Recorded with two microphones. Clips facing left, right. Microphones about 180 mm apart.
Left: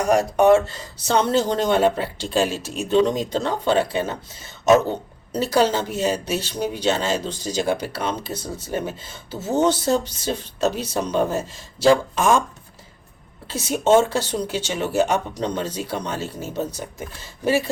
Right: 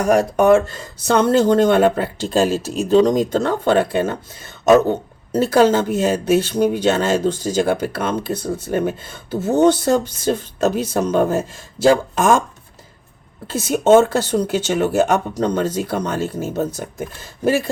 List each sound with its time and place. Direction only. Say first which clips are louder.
0.0 s speech: right 2 dB; 50° right (ahead or behind)
13.5 s speech: right 4 dB; 50° right (ahead or behind)